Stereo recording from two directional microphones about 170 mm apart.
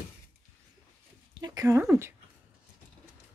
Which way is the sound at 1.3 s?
20° right (ahead or behind).